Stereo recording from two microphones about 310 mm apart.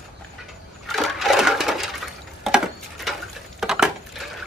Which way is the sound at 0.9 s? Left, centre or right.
Centre.